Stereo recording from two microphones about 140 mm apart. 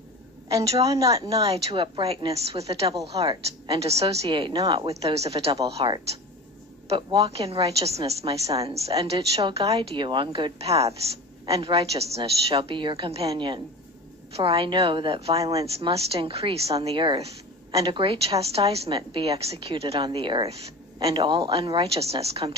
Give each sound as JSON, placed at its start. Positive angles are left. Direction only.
{"t": 0.8, "sound": "a woman's voice", "side_deg": -25}
{"t": 1.5, "sound": "a woman's voice", "side_deg": -40}
{"t": 7.0, "sound": "a woman's voice", "side_deg": -35}
{"t": 7.2, "sound": "a woman's voice", "side_deg": -45}
{"t": 16.7, "sound": "a woman's voice", "side_deg": -35}